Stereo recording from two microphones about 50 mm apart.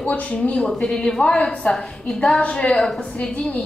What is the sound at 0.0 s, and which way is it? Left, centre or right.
A woman's voice, left.